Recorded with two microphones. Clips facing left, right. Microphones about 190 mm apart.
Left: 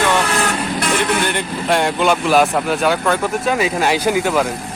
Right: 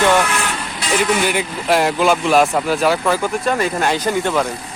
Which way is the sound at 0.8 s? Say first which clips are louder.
Right 2 dB; 60° left (ahead or behind).